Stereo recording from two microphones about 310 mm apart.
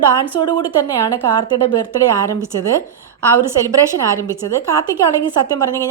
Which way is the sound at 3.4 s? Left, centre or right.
Centre.